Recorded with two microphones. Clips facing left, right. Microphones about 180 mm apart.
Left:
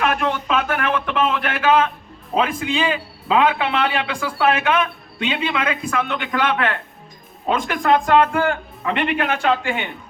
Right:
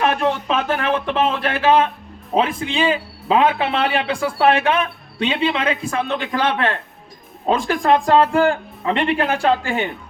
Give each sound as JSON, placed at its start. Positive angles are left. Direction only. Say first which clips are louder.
{"t": 0.0, "sound": "a man's voice", "louder": "right 2 dB", "side_deg": -30}